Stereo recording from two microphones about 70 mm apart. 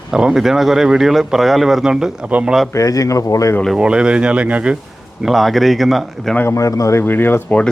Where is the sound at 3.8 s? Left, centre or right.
Centre.